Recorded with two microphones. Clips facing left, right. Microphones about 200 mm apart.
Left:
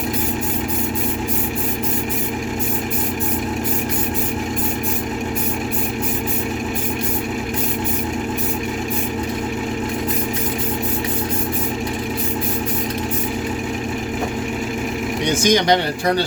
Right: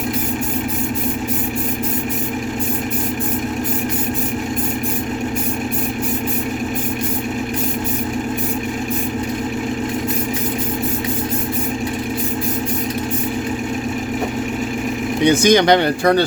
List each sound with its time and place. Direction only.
15.4 s speech: 60° right (ahead or behind)